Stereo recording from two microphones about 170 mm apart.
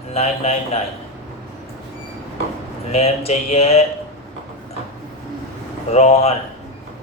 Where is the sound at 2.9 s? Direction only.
40° left (ahead or behind).